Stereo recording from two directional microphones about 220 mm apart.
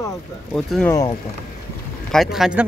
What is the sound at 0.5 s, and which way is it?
Speech, 5° left (ahead or behind).